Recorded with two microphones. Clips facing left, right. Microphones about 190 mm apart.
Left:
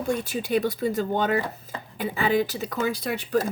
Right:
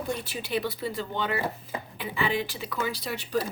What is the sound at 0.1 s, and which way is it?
Speech, 45° left (ahead or behind).